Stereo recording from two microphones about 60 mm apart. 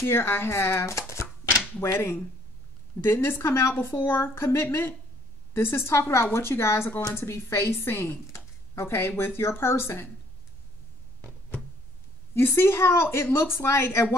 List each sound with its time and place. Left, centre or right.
0.0 s speech: left
12.4 s speech: left